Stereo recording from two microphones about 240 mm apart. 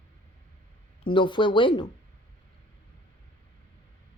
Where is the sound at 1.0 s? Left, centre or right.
Centre.